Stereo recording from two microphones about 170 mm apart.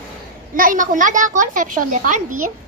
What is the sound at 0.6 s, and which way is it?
A woman's voice, 50° right (ahead or behind).